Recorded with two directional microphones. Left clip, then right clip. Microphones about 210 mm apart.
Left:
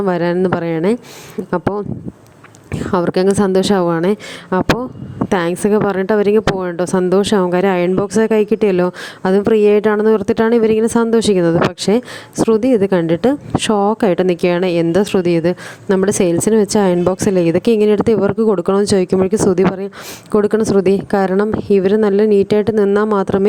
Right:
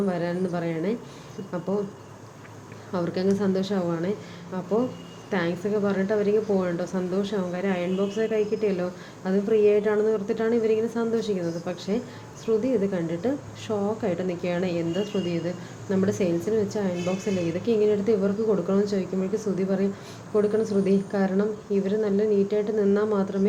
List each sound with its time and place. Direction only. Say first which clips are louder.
0.0 s a woman's voice: left 12 dB; 40° left (ahead or behind)
2.9 s a woman's voice: left 12 dB; 40° left (ahead or behind)